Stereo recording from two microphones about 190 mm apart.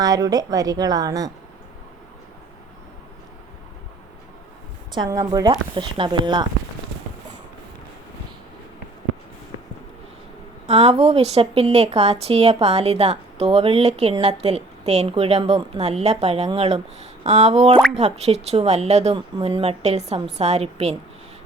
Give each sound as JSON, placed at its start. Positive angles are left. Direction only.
{"t": 0.0, "sound": "speech", "side_deg": -20}
{"t": 4.9, "sound": "speech", "side_deg": -20}
{"t": 10.7, "sound": "a woman's voice", "side_deg": -35}